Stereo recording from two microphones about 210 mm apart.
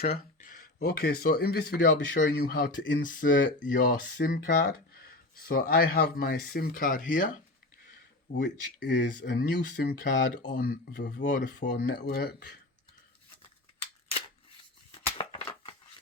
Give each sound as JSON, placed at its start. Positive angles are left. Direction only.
{"t": 0.1, "sound": "speech", "side_deg": 40}
{"t": 3.0, "sound": "speech", "side_deg": 40}
{"t": 5.5, "sound": "speech", "side_deg": 45}
{"t": 8.3, "sound": "speech", "side_deg": 55}
{"t": 11.2, "sound": "speech", "side_deg": 35}
{"t": 12.0, "sound": "speech", "side_deg": 50}
{"t": 15.2, "sound": "scissors", "side_deg": 25}